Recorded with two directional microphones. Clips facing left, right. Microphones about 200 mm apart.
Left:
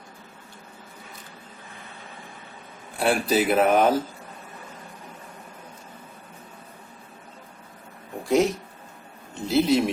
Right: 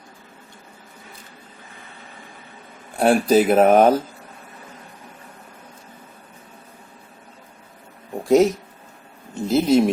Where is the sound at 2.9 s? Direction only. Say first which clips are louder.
Right 6 dB; 45° right (ahead or behind).